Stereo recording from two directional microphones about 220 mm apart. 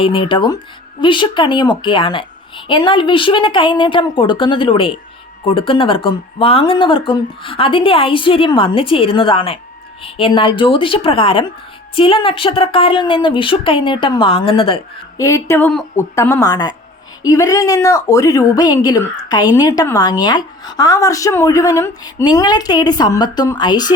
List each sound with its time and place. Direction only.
0.0 s speech: 25° left (ahead or behind)
15.2 s a woman's voice: 10° left (ahead or behind)